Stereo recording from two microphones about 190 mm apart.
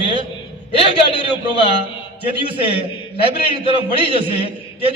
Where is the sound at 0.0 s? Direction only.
25° right (ahead or behind).